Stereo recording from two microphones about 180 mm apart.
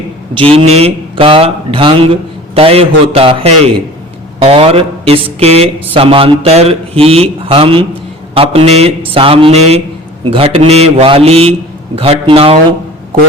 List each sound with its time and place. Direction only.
0.3 s speech: 30° right (ahead or behind)